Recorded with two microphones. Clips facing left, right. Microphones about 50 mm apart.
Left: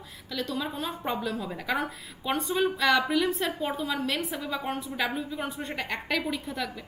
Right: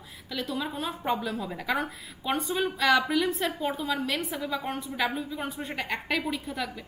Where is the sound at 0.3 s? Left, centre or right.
Centre.